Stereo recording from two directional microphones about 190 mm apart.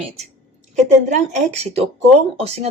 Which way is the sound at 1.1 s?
35° right (ahead or behind).